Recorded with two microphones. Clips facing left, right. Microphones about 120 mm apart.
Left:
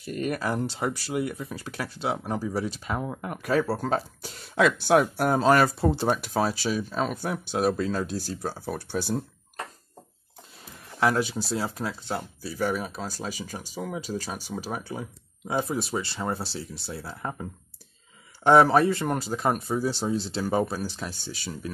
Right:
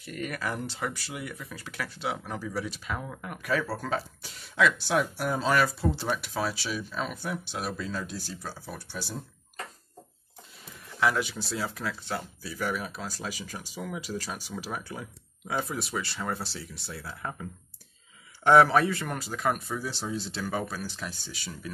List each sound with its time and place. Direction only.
0.0 s speech: 30° left (ahead or behind); by 9.2 s 60° left (ahead or behind)
11.0 s speech: 35° left (ahead or behind)